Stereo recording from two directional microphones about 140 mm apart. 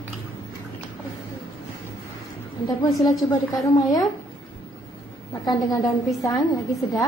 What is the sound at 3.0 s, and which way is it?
A woman's voice, 25° left (ahead or behind).